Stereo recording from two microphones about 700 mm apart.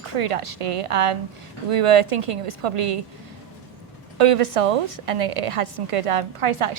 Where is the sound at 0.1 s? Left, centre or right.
Right.